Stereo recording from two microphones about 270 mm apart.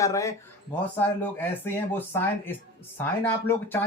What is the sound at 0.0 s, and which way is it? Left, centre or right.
Speech, centre.